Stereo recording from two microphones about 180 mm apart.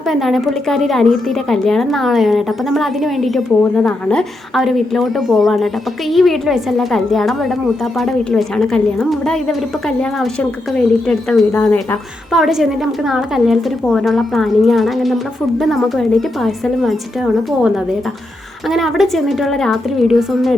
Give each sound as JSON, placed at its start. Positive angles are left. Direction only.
{"t": 0.0, "sound": "a woman's voice", "side_deg": 0}